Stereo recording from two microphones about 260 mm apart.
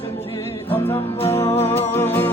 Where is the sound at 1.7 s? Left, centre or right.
Centre.